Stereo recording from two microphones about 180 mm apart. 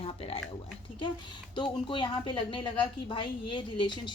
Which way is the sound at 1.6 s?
25° left (ahead or behind).